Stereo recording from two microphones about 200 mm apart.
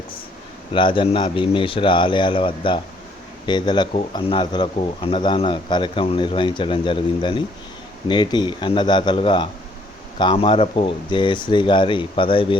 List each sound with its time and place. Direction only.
0.7 s speech: 25° left (ahead or behind)